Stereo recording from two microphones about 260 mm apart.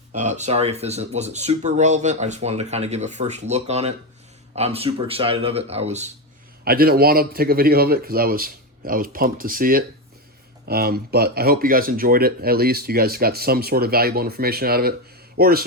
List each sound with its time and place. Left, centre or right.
0.1 s speech: right
6.7 s speech: right